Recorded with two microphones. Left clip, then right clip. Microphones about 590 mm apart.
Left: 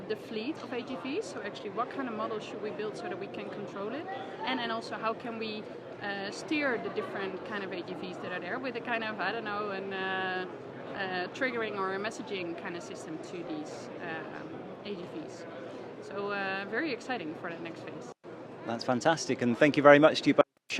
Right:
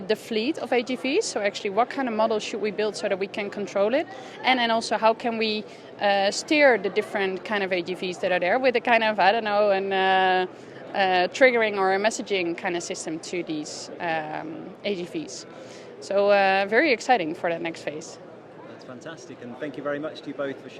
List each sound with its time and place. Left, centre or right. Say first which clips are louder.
0.1 s a woman's voice: right 11 dB; right
16.0 s a woman's voice: right 15 dB; right
18.9 s speech: left 14 dB; left